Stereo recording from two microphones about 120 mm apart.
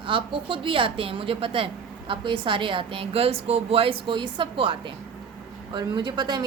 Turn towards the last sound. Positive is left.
turn(degrees=-35)  # may be behind; listen again after turning